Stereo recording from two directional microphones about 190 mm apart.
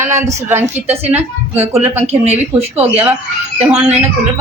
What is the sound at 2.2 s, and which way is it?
Speech, 35° right (ahead or behind).